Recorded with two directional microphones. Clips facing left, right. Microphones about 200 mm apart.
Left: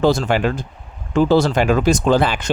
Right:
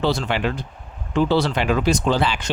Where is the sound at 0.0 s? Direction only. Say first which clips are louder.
Left 5 dB; 45° left (ahead or behind).